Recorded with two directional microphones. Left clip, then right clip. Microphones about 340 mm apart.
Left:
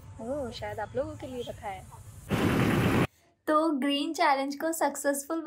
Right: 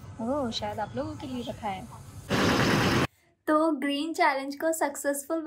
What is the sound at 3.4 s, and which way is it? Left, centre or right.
Speech, centre.